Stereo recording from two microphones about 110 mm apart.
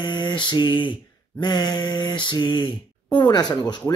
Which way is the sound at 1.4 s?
40° left (ahead or behind).